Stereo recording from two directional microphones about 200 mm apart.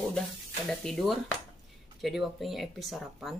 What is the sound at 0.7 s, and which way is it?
Speech, centre (ahead or behind).